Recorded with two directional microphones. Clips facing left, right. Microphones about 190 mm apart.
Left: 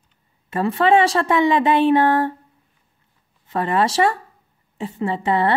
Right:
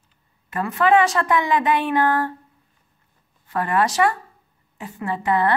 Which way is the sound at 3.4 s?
25° left (ahead or behind).